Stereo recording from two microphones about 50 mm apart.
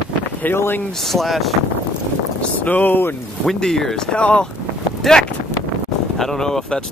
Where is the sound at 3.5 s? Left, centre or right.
Centre.